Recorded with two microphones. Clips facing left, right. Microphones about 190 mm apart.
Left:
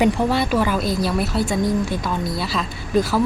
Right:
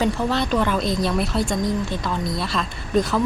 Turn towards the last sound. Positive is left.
turn(degrees=5)  # may be behind; listen again after turning